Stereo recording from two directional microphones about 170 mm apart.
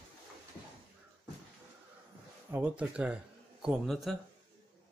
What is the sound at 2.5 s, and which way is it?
Speech, 10° right (ahead or behind).